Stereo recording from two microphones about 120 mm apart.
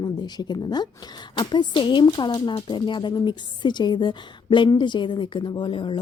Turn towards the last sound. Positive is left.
turn(degrees=45)  # may be behind; listen again after turning